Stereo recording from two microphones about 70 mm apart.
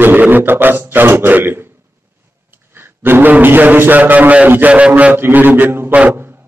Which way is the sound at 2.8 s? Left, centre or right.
Right.